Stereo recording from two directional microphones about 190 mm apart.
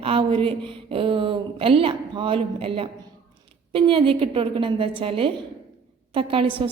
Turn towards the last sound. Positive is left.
turn(degrees=-25)  # may be behind; listen again after turning